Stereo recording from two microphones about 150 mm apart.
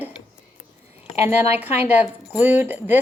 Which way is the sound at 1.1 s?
45° left (ahead or behind).